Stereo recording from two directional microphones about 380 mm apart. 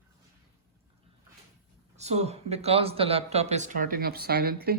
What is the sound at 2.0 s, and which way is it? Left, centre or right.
Speech, centre.